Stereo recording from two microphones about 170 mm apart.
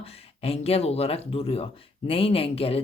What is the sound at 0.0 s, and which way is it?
Speech, 35° left (ahead or behind).